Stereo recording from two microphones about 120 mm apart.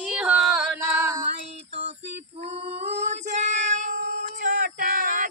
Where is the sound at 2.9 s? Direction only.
70° right (ahead or behind); by 4.7 s 90° right.